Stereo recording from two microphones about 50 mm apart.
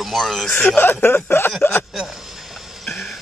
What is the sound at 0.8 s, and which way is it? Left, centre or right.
Speech, left.